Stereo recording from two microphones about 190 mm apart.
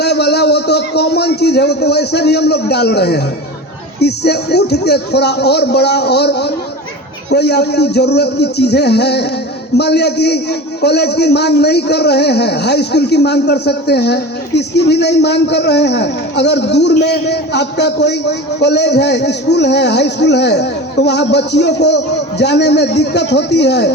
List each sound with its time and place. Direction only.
0.0 s a man's voice: 60° left (ahead or behind)